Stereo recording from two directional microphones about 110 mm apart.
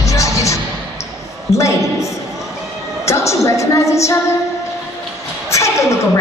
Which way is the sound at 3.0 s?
25° left (ahead or behind).